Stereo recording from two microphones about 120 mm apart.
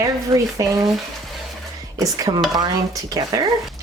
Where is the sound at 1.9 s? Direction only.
30° right (ahead or behind).